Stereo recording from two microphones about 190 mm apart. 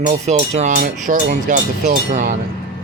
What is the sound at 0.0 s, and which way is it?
Speech, 40° right (ahead or behind).